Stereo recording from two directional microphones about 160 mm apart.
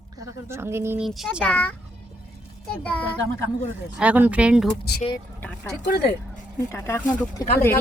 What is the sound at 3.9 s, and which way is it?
Speech, 10° right (ahead or behind).